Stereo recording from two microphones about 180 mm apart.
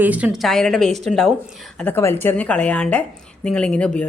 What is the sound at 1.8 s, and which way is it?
A woman's voice, 10° left (ahead or behind).